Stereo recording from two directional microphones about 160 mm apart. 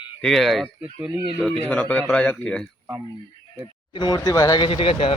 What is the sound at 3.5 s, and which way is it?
Speech, 30° left (ahead or behind).